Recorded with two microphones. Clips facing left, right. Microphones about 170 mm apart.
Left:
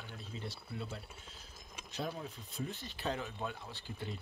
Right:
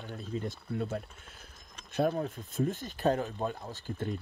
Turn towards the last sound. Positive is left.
turn(degrees=-45)  # may be behind; listen again after turning